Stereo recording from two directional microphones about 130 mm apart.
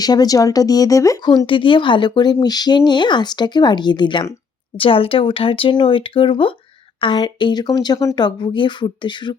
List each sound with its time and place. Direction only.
0.0 s speech: 30° left (ahead or behind)
1.5 s speech: 40° left (ahead or behind)